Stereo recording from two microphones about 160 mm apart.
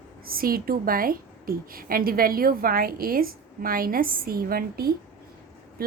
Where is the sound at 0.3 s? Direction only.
65° right (ahead or behind).